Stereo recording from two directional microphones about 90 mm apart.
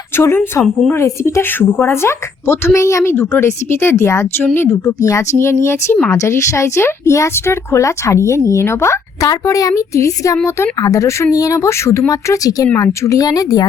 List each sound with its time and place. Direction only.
0.2 s speech: 30° left (ahead or behind)